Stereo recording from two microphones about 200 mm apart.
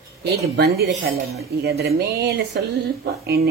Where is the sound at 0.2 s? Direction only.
50° right (ahead or behind).